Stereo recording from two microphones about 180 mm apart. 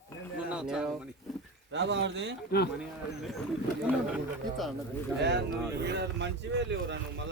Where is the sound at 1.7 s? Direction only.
80° right.